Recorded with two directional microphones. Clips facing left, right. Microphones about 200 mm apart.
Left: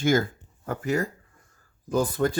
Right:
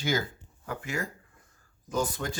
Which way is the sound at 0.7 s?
40° left (ahead or behind).